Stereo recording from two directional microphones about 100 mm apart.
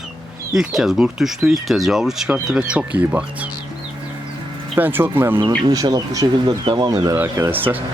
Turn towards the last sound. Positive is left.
turn(degrees=-25)  # may be behind; listen again after turning